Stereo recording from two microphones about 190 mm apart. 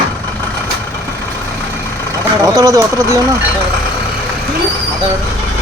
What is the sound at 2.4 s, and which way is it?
Speech, 15° right (ahead or behind).